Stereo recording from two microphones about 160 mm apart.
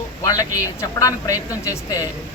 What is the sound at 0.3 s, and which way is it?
A man's voice, 20° left (ahead or behind).